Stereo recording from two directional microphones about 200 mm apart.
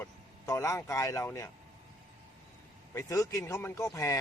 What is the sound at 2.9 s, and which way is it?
Speech, 15° left (ahead or behind).